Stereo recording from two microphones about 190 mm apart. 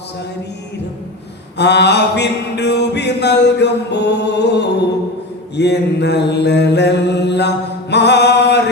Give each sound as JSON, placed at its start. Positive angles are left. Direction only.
{"t": 1.5, "sound": "music", "side_deg": 65}